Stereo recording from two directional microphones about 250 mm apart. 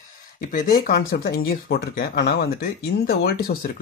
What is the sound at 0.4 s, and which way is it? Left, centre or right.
Speech, left.